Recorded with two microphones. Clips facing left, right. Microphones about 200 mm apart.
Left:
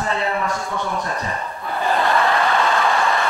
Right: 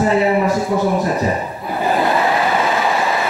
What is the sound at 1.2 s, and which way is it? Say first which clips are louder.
Chuckle: right 8 dB; 5° right (ahead or behind).